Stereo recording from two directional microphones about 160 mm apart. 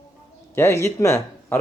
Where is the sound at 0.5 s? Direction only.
15° left (ahead or behind).